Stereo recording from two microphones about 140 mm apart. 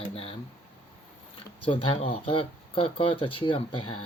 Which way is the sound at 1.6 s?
40° left (ahead or behind).